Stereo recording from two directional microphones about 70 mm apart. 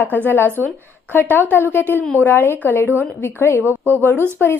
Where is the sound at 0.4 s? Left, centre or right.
Right.